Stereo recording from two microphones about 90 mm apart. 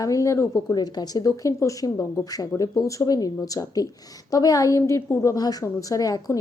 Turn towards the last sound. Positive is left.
turn(degrees=40)  # may be behind; listen again after turning